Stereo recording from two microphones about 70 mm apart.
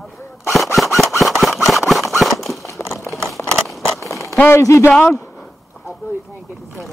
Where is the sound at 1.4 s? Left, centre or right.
Centre.